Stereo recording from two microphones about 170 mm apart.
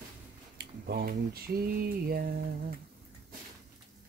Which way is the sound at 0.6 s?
70° right (ahead or behind).